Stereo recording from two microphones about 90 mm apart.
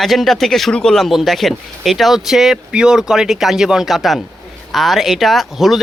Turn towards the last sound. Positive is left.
turn(degrees=0)  # may be behind; listen again after turning